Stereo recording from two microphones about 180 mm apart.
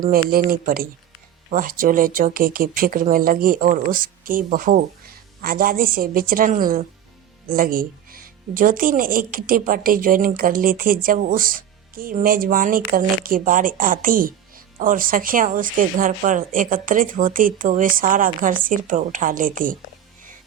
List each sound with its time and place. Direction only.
0.1 s speech: 55° right (ahead or behind)